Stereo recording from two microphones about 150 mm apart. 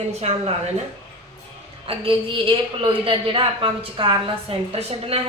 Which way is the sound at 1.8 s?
35° right (ahead or behind).